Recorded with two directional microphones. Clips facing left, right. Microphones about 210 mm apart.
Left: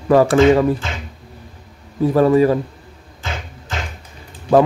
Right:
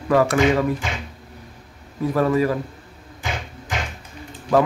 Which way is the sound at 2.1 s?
30° left (ahead or behind).